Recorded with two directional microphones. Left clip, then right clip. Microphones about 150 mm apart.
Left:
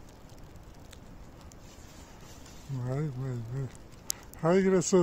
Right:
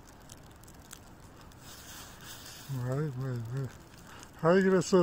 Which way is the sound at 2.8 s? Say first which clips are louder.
Right 1 dB; 20° left (ahead or behind).